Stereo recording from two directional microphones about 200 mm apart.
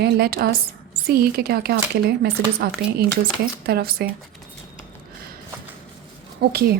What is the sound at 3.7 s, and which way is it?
Speech, 50° right (ahead or behind).